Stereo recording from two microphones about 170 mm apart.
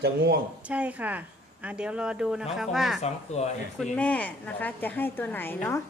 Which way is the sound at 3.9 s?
10° left (ahead or behind).